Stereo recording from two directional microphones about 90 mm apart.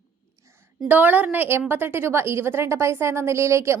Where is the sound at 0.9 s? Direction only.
20° right (ahead or behind).